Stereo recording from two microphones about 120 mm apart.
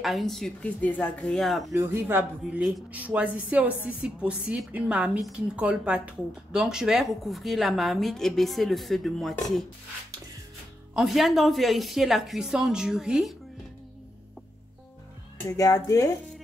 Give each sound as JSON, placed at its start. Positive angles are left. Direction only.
{"t": 0.0, "sound": "a woman's voice", "side_deg": 0}
{"t": 1.7, "sound": "a woman's voice", "side_deg": -20}
{"t": 11.0, "sound": "a woman's voice", "side_deg": 0}
{"t": 15.3, "sound": "speech", "side_deg": 25}